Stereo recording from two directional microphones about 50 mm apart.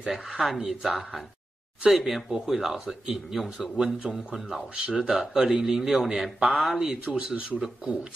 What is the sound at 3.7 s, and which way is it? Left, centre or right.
Speech, centre.